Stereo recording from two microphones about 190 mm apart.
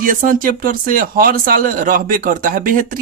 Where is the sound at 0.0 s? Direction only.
45° right (ahead or behind).